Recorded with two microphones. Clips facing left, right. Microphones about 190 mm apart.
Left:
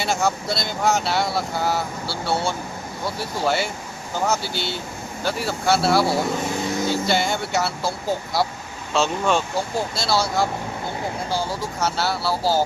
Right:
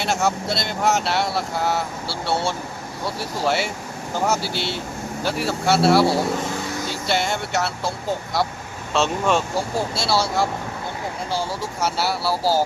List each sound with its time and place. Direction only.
0.0 s speech: centre (ahead or behind)
2.0 s speech: 25° right (ahead or behind)
3.4 s speech: 5° right (ahead or behind)
6.5 s vehicle: 25° left (ahead or behind)
7.1 s speech: centre (ahead or behind)